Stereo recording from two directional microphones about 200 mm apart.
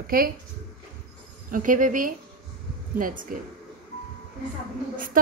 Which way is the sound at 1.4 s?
40° right (ahead or behind).